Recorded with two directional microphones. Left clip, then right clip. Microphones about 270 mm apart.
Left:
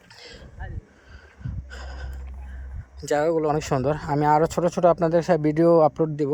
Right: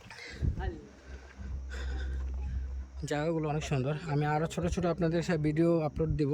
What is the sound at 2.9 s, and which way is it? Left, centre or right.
Speech, centre.